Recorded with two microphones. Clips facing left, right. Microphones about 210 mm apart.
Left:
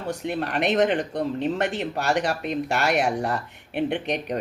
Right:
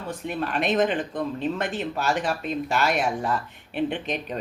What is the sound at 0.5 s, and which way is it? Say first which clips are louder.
Speech: left 2 dB; 65° left (ahead or behind).